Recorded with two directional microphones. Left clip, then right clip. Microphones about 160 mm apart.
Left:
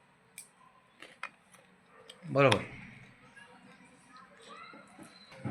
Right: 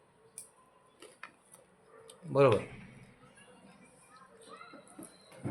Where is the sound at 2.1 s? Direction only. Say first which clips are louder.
Even; 10° right (ahead or behind).